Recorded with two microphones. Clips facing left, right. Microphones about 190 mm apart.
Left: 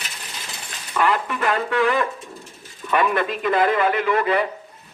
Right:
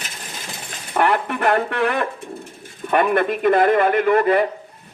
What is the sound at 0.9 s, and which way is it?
Speech, 60° right (ahead or behind).